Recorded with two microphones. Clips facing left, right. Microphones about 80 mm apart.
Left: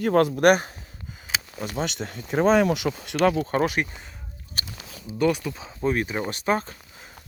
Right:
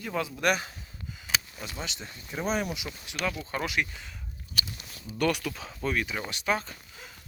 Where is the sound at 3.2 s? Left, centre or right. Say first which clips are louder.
Left 11 dB; left.